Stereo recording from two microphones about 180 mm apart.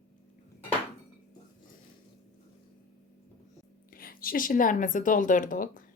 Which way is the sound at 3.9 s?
55° left (ahead or behind).